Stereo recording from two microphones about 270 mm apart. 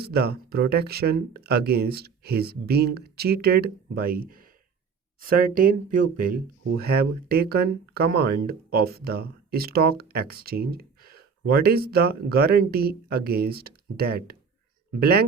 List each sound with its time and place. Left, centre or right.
0.0 s speech: right